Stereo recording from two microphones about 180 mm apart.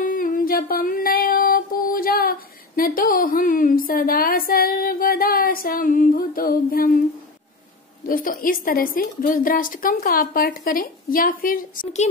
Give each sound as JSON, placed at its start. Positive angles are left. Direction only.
{"t": 0.0, "sound": "music", "side_deg": 50}
{"t": 8.1, "sound": "a woman's voice", "side_deg": 50}